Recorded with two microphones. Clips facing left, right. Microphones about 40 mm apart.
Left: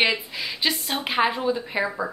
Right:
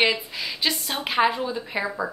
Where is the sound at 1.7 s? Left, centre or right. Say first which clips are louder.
Left 1 dB; centre.